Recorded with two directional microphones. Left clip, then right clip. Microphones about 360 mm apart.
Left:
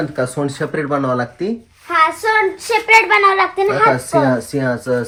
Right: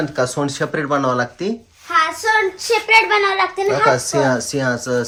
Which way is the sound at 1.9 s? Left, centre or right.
Centre.